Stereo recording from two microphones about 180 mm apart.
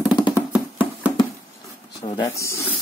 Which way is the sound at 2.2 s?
15° left (ahead or behind).